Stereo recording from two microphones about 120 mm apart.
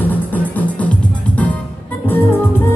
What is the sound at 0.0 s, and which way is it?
Music, 15° left (ahead or behind).